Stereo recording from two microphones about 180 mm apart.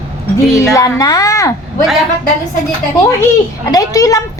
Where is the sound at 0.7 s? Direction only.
20° left (ahead or behind).